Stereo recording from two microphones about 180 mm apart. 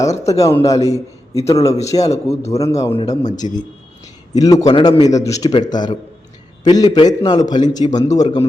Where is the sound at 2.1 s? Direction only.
35° left (ahead or behind).